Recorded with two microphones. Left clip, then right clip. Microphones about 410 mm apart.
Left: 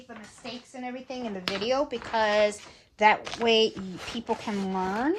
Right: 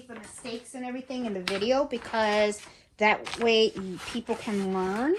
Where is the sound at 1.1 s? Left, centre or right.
Left.